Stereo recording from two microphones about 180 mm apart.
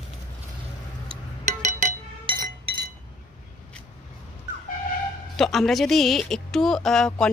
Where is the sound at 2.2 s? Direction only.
25° right (ahead or behind).